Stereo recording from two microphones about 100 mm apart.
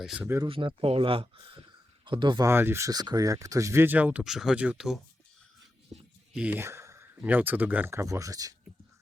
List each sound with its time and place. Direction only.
0.0 s speech: 5° right (ahead or behind)
0.4 s speech: 65° right (ahead or behind)
2.4 s speech: 25° right (ahead or behind)
2.9 s speech: 40° right (ahead or behind); by 4.3 s 15° right (ahead or behind)
4.3 s speech: 5° right (ahead or behind)
5.9 s a sound: 10° right (ahead or behind)
6.6 s a sound: 25° right (ahead or behind)
7.3 s speech: 20° right (ahead or behind)
7.9 s speech: 30° right (ahead or behind)